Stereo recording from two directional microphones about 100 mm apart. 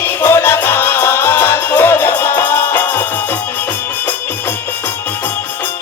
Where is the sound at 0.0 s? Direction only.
20° left (ahead or behind).